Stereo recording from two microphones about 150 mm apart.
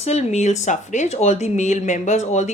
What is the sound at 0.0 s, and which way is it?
Speech, 45° left (ahead or behind).